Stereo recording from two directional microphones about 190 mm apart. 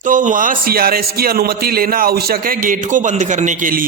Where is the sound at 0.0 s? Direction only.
40° right (ahead or behind).